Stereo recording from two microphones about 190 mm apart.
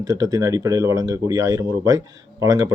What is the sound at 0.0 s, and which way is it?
Speech, 20° right (ahead or behind).